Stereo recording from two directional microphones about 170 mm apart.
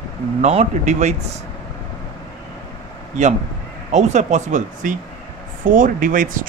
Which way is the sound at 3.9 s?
45° right (ahead or behind).